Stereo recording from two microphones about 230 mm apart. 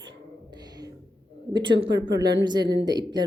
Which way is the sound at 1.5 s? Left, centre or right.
Right.